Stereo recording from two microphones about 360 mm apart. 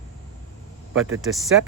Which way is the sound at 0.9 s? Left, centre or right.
Right.